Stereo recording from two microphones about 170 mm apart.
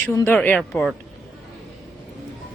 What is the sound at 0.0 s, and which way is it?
Speech, 15° left (ahead or behind).